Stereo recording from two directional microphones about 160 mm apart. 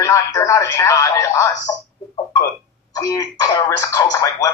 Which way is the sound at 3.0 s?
20° left (ahead or behind).